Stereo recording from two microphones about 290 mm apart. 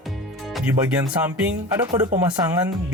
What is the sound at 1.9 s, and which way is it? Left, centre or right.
Speech, centre.